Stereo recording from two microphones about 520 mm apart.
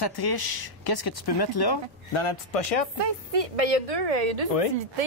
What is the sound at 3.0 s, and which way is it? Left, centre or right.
Speech, right.